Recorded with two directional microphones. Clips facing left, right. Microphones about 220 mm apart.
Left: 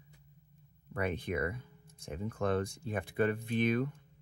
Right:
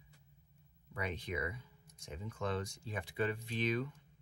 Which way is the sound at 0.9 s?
55° left (ahead or behind).